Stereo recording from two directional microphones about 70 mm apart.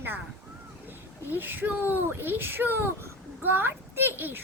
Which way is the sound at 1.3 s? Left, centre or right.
Right.